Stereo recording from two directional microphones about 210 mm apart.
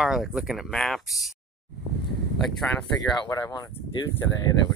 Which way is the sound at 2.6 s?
10° left (ahead or behind).